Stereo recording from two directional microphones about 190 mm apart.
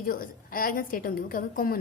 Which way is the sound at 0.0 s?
50° left (ahead or behind).